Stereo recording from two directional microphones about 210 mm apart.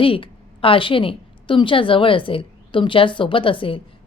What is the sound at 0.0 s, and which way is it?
A woman's voice, 25° left (ahead or behind).